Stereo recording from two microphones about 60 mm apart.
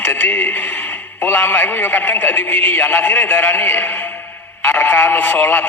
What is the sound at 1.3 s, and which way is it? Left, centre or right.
A man's voice, left.